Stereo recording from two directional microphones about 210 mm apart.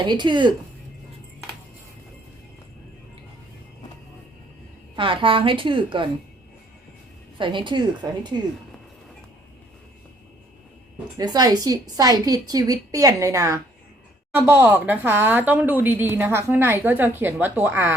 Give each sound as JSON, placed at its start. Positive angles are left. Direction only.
{"t": 0.0, "sound": "a woman's voice", "side_deg": -20}
{"t": 4.9, "sound": "a woman's voice", "side_deg": -25}
{"t": 7.3, "sound": "a woman's voice", "side_deg": -25}
{"t": 11.2, "sound": "a woman's voice", "side_deg": -20}